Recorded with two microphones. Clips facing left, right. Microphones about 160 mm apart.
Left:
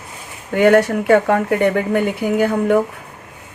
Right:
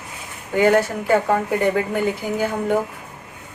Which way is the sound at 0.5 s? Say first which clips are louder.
Left 4 dB; 65° left (ahead or behind).